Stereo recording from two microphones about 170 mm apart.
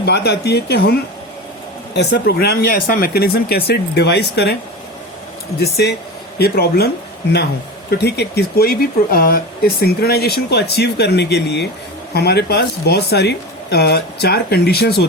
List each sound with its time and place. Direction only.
0.0 s speech: 75° left (ahead or behind)
2.0 s speech: 80° left
5.5 s speech: 70° left (ahead or behind)